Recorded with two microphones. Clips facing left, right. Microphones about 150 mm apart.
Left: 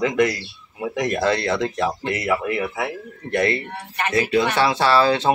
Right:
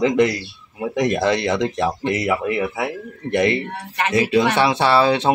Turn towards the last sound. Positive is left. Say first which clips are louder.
# right 1 dB
turn(degrees=-20)  # may be behind; listen again after turning